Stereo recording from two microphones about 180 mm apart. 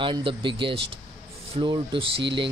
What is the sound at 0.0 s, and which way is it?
Speech, 30° right (ahead or behind).